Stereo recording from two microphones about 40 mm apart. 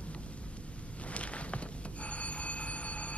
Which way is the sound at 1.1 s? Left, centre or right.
Left.